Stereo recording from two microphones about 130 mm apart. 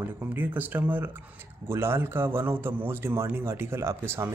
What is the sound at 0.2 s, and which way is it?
A man's voice, 15° right (ahead or behind).